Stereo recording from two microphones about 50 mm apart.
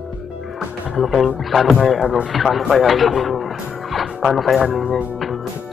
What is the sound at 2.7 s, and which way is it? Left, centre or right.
Music, centre.